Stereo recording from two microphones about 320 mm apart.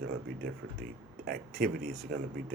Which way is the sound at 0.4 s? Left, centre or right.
Right.